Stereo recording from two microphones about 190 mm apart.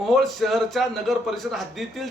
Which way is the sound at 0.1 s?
Centre (ahead or behind).